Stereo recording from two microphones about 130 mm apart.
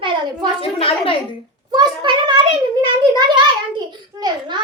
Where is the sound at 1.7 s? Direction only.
35° right (ahead or behind).